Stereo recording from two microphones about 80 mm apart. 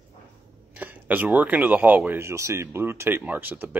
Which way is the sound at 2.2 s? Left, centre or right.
Right.